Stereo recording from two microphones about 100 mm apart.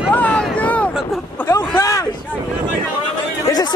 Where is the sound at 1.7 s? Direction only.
35° left (ahead or behind).